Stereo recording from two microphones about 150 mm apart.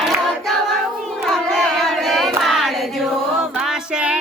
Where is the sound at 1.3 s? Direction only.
5° left (ahead or behind).